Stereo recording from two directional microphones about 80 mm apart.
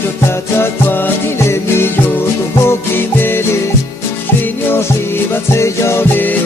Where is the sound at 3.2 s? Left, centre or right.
Left.